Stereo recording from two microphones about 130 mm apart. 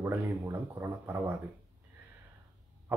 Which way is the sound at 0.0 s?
15° right (ahead or behind).